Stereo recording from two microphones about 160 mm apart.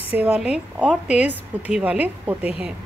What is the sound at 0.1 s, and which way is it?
A woman's voice, 10° right (ahead or behind).